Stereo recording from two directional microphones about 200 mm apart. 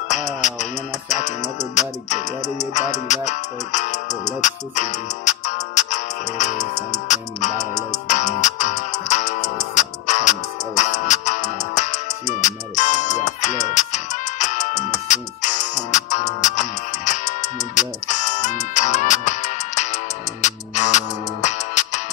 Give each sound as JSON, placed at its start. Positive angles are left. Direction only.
{"t": 0.1, "sound": "music", "side_deg": 35}